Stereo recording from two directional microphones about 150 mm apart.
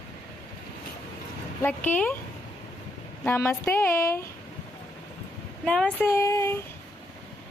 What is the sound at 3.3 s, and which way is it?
Speech, 15° left (ahead or behind).